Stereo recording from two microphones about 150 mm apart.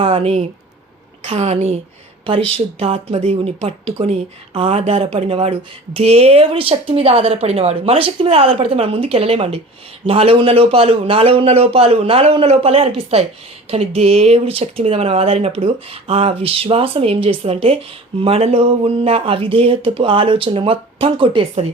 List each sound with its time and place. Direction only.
0.0 s a woman's voice: 40° right (ahead or behind)